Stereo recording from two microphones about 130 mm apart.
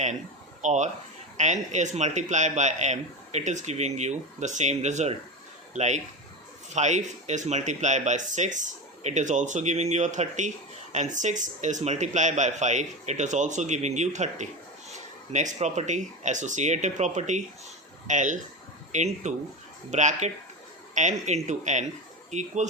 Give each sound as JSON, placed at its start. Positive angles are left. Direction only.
{"t": 0.6, "sound": "a man's voice", "side_deg": -65}